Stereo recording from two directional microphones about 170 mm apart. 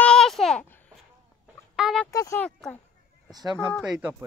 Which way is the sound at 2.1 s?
20° left (ahead or behind).